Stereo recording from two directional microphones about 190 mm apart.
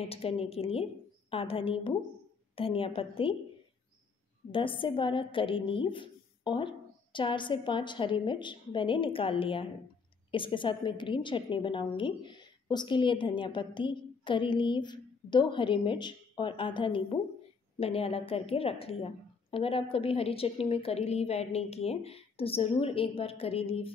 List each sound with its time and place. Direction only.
0.1 s a woman's voice: 30° left (ahead or behind)
4.5 s a woman's voice: 25° left (ahead or behind)